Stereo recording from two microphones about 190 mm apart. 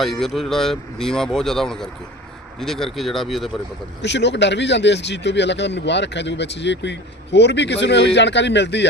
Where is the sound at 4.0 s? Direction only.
65° left (ahead or behind).